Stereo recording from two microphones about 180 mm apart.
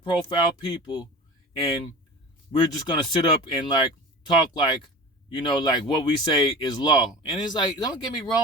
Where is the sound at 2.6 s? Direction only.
25° left (ahead or behind).